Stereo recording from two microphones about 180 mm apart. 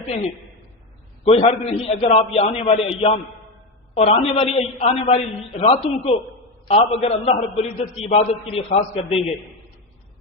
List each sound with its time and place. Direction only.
1.2 s a man's voice: 35° left (ahead or behind)